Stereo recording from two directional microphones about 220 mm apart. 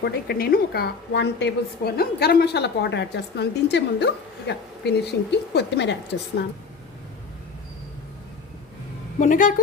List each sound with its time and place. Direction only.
0.0 s a woman's voice: 45° left (ahead or behind)
9.1 s a woman's voice: 35° left (ahead or behind)